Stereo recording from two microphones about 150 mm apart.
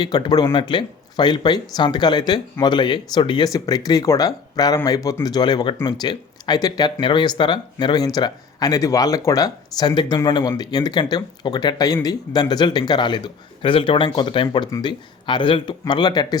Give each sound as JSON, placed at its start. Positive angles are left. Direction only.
{"t": 0.0, "sound": "speech", "side_deg": 30}